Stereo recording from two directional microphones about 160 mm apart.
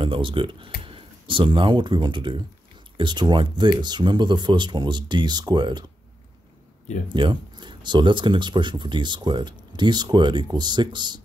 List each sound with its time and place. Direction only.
0.0 s speech: 30° right (ahead or behind)
7.1 s speech: 30° right (ahead or behind)